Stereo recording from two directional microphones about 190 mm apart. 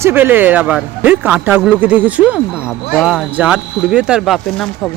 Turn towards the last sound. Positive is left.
turn(degrees=-5)  # may be behind; listen again after turning